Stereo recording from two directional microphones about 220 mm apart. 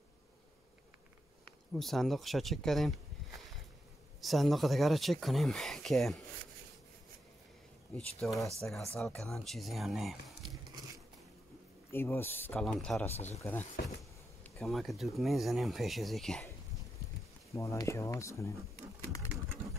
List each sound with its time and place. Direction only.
1.7 s speech: centre (ahead or behind)
4.2 s speech: centre (ahead or behind)
7.9 s speech: centre (ahead or behind)
11.9 s speech: 10° left (ahead or behind)
13.1 s speech: 30° left (ahead or behind)
13.4 s speech: 10° left (ahead or behind)
17.5 s speech: 15° left (ahead or behind)